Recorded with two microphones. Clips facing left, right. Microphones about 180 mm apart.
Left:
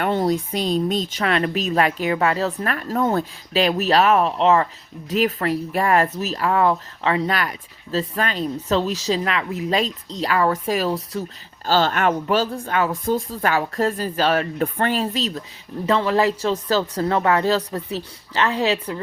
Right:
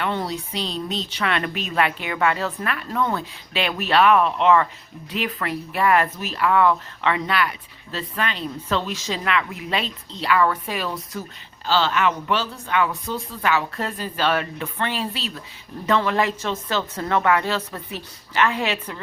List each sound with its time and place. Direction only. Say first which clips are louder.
0.0 s speech: left 6 dB; 45° left (ahead or behind)
11.6 s speech: left 2 dB; 45° left (ahead or behind)
15.9 s speech: left 2 dB; 30° left (ahead or behind)